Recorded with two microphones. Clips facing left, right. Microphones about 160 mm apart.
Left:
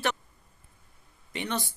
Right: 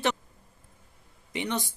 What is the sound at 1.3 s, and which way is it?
Speech, 20° right (ahead or behind).